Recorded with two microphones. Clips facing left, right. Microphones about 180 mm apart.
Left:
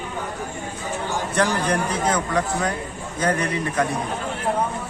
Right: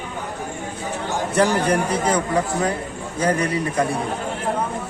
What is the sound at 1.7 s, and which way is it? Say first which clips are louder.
A man's voice: right 2 dB; 10° right (ahead or behind).